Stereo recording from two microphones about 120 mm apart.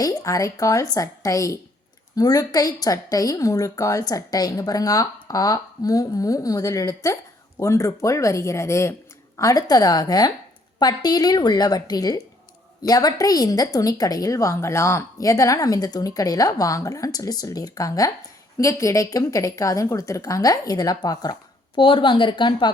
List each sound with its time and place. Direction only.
0.0 s a woman's voice: 30° left (ahead or behind)